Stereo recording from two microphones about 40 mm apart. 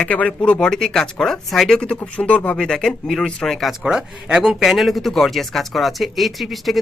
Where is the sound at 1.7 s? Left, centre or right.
Left.